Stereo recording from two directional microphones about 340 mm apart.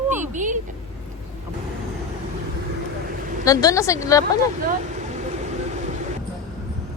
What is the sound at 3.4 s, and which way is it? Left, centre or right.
Speech, centre.